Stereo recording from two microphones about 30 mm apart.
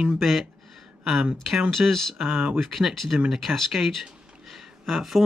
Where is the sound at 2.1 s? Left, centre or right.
Right.